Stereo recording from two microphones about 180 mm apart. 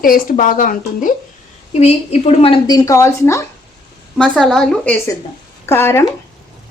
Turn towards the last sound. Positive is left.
turn(degrees=15)  # may be behind; listen again after turning